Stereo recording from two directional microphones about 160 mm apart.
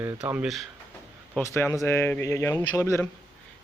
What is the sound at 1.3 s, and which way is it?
Speech, 15° left (ahead or behind).